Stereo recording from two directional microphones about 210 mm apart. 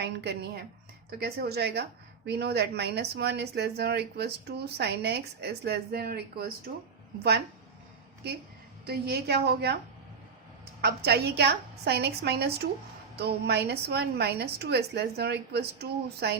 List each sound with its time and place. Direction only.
0.0 s speech: 55° right (ahead or behind)
8.9 s speech: 50° right (ahead or behind)
10.8 s speech: 50° right (ahead or behind)